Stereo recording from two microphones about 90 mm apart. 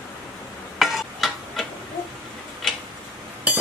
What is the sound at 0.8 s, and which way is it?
Tick-tock, centre (ahead or behind).